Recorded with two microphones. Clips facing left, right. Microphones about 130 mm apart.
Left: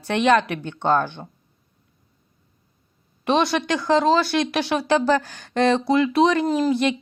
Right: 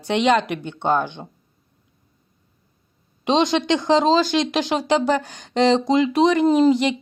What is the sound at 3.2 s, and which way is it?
Speech, 20° right (ahead or behind).